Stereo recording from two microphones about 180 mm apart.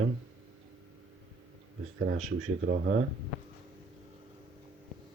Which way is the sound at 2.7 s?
60° right (ahead or behind).